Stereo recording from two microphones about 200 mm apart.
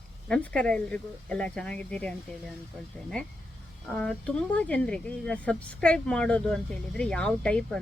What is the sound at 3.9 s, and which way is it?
Speech, 5° left (ahead or behind).